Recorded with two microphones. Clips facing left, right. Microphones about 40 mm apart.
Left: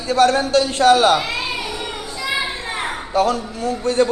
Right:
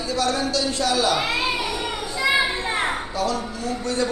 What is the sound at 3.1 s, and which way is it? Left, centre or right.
Speech, left.